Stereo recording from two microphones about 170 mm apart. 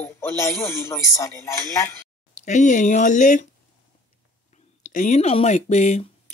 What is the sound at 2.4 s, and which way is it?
Speech, 45° left (ahead or behind).